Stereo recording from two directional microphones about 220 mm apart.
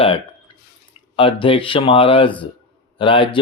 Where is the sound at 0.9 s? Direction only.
25° left (ahead or behind).